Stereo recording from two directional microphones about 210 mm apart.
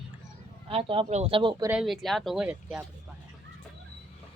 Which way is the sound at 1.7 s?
Centre (ahead or behind).